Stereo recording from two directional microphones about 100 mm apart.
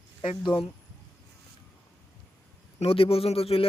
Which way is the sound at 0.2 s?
60° left (ahead or behind).